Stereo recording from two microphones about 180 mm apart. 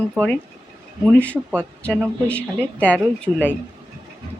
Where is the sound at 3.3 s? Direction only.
20° right (ahead or behind).